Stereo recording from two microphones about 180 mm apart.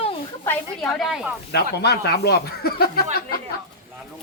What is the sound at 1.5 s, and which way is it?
Speech, 65° left (ahead or behind).